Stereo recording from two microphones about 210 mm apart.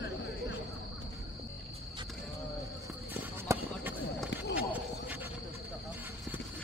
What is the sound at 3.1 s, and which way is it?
Run, 10° right (ahead or behind).